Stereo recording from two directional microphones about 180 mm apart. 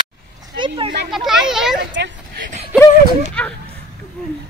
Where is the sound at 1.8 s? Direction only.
75° right (ahead or behind).